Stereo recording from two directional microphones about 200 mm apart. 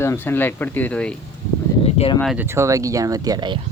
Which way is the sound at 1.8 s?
30° left (ahead or behind).